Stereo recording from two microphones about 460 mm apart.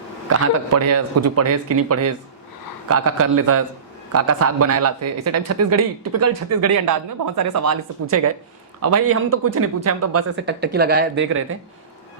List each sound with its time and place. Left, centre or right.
0.3 s speech: right